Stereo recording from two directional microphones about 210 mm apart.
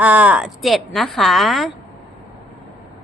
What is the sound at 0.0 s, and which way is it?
A woman's voice, 5° right (ahead or behind).